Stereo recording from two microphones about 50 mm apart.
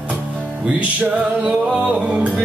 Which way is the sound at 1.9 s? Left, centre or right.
Centre.